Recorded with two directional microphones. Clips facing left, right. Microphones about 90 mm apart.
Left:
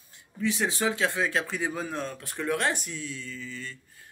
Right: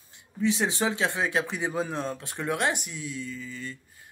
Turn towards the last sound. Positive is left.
turn(degrees=-15)  # may be behind; listen again after turning